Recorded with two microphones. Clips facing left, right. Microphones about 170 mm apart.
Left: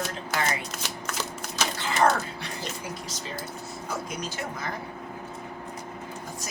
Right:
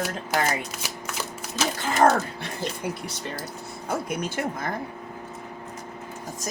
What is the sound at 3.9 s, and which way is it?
Speech, 55° right (ahead or behind).